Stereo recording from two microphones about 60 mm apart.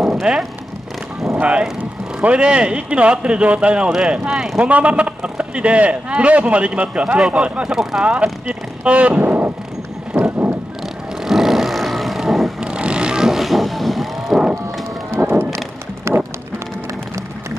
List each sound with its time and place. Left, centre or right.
0.2 s speech: centre
4.6 s a man's voice: right
8.0 s speech: right
10.1 s vehicle: centre
12.5 s vehicle: centre
15.1 s music: right
16.1 s run: right